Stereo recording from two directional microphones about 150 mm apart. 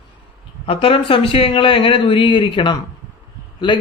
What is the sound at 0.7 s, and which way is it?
A man's voice, 40° left (ahead or behind).